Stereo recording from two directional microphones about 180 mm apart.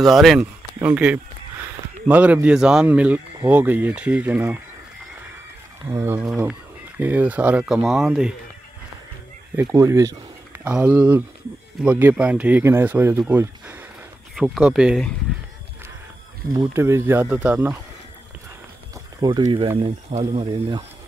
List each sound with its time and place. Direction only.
0.0 s speech: centre (ahead or behind)
5.9 s speech: 10° right (ahead or behind)
9.6 s speech: 15° right (ahead or behind); by 15.1 s centre (ahead or behind)
16.5 s speech: 15° right (ahead or behind)
19.2 s speech: 25° right (ahead or behind)